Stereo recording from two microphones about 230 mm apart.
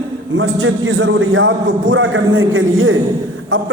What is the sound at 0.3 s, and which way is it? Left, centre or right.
A man's voice, right.